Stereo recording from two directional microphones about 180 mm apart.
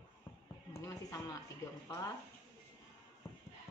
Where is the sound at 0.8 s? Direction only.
20° left (ahead or behind).